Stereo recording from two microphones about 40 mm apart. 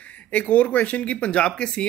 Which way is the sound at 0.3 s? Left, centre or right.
Left.